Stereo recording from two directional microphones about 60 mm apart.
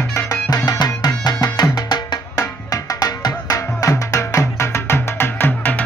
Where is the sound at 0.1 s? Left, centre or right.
Left.